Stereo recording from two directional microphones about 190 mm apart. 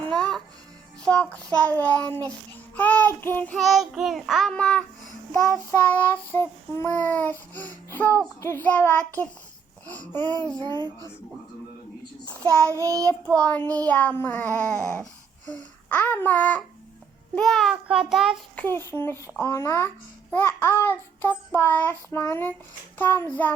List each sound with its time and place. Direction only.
0.1 s music: 5° left (ahead or behind)
1.0 s child singing: 5° left (ahead or behind)
5.9 s child singing: 10° left (ahead or behind)
10.6 s a child's voice: 20° right (ahead or behind)
12.8 s child singing: 15° right (ahead or behind)
13.2 s child singing: 5° left (ahead or behind)
15.4 s babbling: 10° left (ahead or behind)
17.3 s child singing: centre (ahead or behind)
18.6 s child singing: 10° left (ahead or behind)